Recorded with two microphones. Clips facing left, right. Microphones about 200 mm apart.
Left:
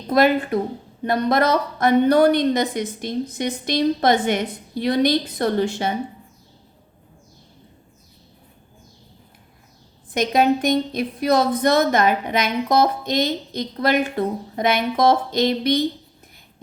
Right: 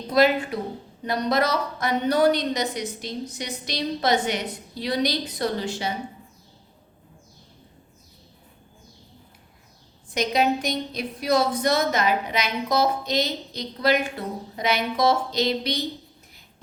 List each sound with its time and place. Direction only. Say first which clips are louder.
0.1 s speech: left 3 dB; 50° left (ahead or behind)
10.2 s speech: left 4 dB; 50° left (ahead or behind)